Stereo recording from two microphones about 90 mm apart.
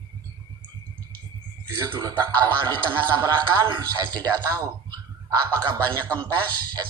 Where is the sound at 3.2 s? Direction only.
50° right (ahead or behind).